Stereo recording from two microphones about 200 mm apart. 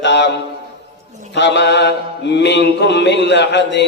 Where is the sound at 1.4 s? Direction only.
60° left (ahead or behind).